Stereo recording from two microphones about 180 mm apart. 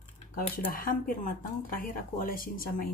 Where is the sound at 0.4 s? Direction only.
50° left (ahead or behind).